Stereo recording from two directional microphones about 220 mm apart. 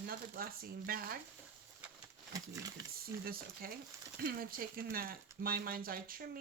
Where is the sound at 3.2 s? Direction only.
40° right (ahead or behind).